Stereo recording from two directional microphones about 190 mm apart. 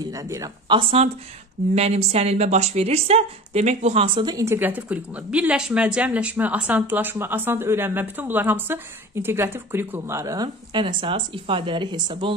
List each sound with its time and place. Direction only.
0.0 s a woman's voice: 15° right (ahead or behind)